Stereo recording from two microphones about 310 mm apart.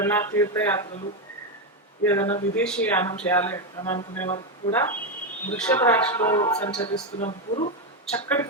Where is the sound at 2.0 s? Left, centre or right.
Centre.